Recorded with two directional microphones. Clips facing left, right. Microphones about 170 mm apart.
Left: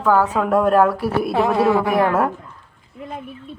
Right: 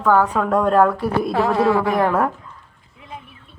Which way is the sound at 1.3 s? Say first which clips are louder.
Left 1 dB; 20° left (ahead or behind).